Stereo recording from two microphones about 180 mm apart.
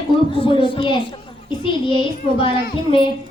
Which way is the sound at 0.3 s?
30° left (ahead or behind).